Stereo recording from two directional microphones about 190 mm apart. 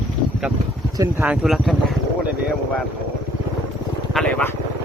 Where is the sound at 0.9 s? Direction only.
15° right (ahead or behind).